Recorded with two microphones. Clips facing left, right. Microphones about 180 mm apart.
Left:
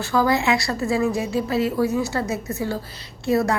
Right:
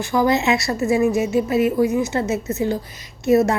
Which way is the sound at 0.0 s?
15° right (ahead or behind).